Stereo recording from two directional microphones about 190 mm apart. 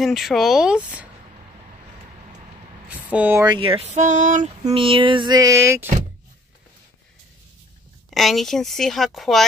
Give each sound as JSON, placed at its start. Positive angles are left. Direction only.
{"t": 0.0, "sound": "a woman's voice", "side_deg": 0}
{"t": 3.0, "sound": "speech", "side_deg": -10}
{"t": 3.4, "sound": "speech", "side_deg": -25}
{"t": 4.7, "sound": "speech", "side_deg": -30}
{"t": 8.1, "sound": "a woman's voice", "side_deg": 0}